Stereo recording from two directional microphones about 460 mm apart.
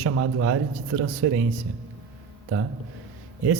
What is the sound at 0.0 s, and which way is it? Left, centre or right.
Speech, right.